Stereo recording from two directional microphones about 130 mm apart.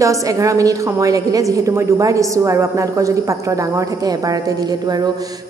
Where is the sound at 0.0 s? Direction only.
25° right (ahead or behind).